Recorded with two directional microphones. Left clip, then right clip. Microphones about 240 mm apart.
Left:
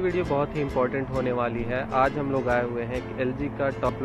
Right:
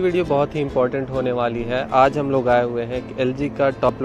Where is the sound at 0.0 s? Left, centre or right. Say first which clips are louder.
Right 6 dB; right.